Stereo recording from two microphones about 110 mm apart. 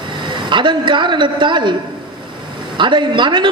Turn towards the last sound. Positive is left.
turn(degrees=-45)  # may be behind; listen again after turning